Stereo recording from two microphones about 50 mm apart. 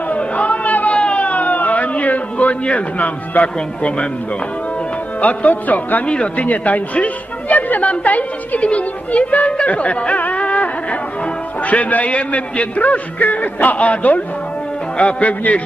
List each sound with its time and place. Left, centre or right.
0.1 s a sound: left
3.5 s a woman's voice: left
5.2 s a man's voice: left
6.0 s a woman's voice: left